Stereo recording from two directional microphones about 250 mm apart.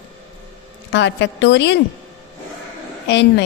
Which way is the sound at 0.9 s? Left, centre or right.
Left.